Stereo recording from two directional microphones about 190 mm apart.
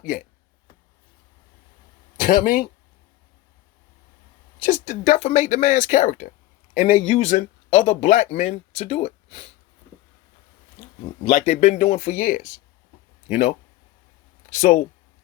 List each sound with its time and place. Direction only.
2.2 s speech: 45° left (ahead or behind)
4.6 s speech: 40° left (ahead or behind)
11.0 s speech: 35° left (ahead or behind)